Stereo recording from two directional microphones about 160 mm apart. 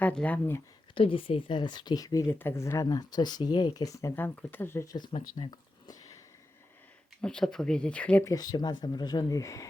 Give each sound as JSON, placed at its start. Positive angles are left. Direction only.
{"t": 0.0, "sound": "speech", "side_deg": 10}
{"t": 0.9, "sound": "speech", "side_deg": 35}
{"t": 7.2, "sound": "speech", "side_deg": 5}
{"t": 8.2, "sound": "speech", "side_deg": 20}